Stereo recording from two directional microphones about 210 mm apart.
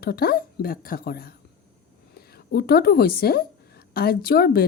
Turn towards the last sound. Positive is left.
turn(degrees=45)  # may be behind; listen again after turning